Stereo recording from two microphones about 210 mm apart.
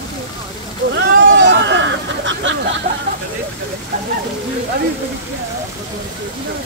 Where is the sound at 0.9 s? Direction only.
60° right (ahead or behind).